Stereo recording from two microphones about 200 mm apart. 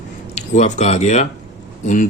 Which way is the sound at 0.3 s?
35° left (ahead or behind).